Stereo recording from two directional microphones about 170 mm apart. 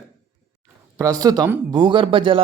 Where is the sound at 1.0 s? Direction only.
20° right (ahead or behind).